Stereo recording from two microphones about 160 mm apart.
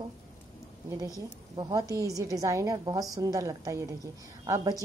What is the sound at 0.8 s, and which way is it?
Speech, 20° right (ahead or behind).